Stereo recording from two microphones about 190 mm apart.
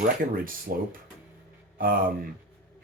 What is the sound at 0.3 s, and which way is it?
Speech, 50° right (ahead or behind).